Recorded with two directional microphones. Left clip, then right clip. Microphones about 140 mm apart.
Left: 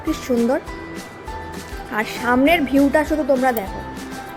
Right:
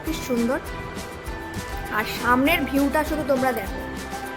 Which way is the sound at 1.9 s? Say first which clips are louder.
Left 2 dB; 15° left (ahead or behind).